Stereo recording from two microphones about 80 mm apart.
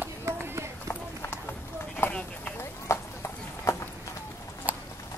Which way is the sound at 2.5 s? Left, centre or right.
Left.